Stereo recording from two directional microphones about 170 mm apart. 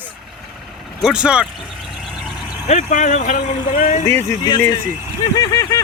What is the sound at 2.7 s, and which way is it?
Speech, 45° left (ahead or behind).